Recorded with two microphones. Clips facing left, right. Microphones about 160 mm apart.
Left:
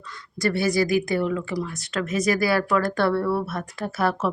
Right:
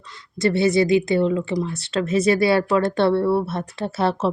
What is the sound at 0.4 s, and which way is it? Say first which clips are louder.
A woman's voice: right 4 dB; 25° right (ahead or behind).